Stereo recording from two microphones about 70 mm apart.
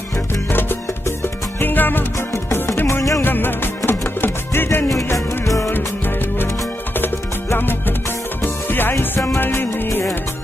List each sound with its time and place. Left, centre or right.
0.3 s music: left
2.3 s music: left
3.3 s music: left
4.8 s music: left
7.5 s music: left